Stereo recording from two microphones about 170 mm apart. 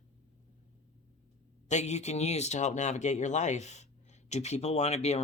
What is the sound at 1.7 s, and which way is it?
Speech, 40° left (ahead or behind).